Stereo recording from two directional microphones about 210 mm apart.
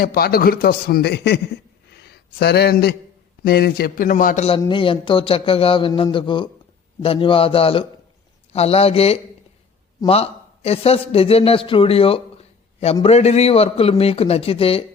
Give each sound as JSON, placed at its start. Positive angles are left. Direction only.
{"t": 0.0, "sound": "a man's voice", "side_deg": 45}
{"t": 1.9, "sound": "a sound", "side_deg": 50}
{"t": 3.4, "sound": "a man's voice", "side_deg": 45}
{"t": 4.6, "sound": "a man's voice", "side_deg": 25}